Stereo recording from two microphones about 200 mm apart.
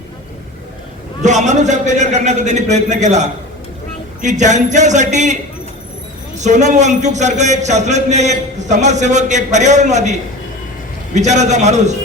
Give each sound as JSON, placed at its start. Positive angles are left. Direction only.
{"t": 1.2, "sound": "a man's voice", "side_deg": -35}
{"t": 6.4, "sound": "a man's voice", "side_deg": -35}